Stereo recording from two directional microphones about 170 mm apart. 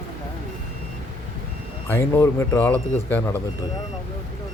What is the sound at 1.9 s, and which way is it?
Speech, 15° left (ahead or behind).